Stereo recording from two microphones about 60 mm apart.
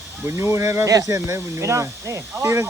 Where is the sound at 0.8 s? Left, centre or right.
Right.